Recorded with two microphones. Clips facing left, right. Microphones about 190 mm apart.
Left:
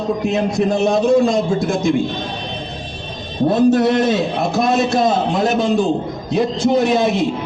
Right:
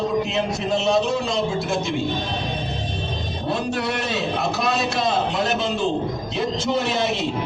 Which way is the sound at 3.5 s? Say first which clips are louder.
Left 11 dB; 45° left (ahead or behind).